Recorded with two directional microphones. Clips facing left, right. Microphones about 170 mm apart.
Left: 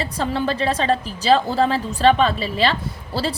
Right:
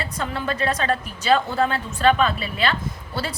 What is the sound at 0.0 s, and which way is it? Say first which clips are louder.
A woman's voice: left 5 dB; 30° left (ahead or behind).